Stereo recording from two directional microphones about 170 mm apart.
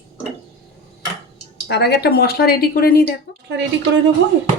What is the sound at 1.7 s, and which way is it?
A woman's voice, 75° left (ahead or behind).